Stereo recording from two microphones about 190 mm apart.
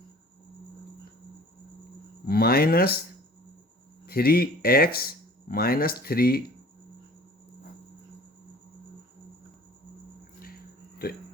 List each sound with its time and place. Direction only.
2.2 s speech: 55° left (ahead or behind)
4.0 s speech: 55° left (ahead or behind)
10.4 s a sound: 50° left (ahead or behind)